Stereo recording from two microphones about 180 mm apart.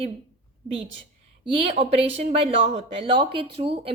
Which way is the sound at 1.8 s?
30° right (ahead or behind).